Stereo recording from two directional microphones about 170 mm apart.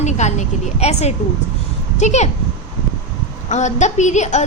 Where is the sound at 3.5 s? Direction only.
45° left (ahead or behind).